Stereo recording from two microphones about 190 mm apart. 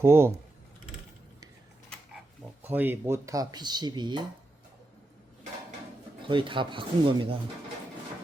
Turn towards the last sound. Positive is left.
turn(degrees=-25)  # may be behind; listen again after turning